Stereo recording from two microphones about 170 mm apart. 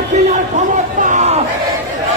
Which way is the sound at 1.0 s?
45° right (ahead or behind).